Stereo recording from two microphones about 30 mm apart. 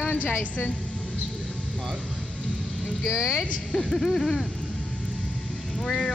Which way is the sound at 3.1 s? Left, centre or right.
Centre.